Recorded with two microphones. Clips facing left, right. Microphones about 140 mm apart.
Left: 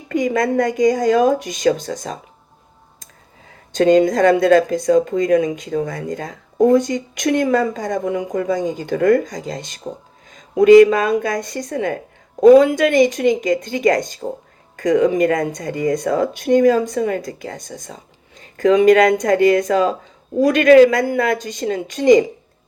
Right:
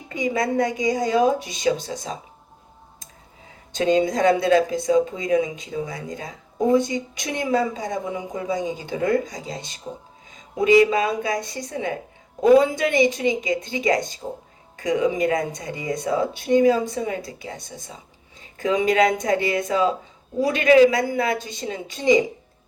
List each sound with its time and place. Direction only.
0.1 s speech: 55° left (ahead or behind)
3.8 s speech: 50° left (ahead or behind)
7.2 s speech: 70° left (ahead or behind)
12.4 s a woman's voice: 75° left (ahead or behind)
12.7 s speech: 50° left (ahead or behind)
18.5 s a man's voice: 65° left (ahead or behind)
20.4 s a man's voice: 65° left (ahead or behind)
21.4 s a woman's voice: 65° left (ahead or behind)